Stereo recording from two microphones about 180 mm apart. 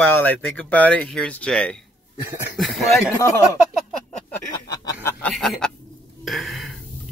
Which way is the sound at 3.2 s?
15° left (ahead or behind).